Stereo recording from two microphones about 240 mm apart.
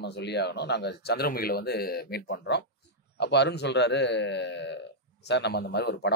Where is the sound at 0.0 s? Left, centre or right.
Left.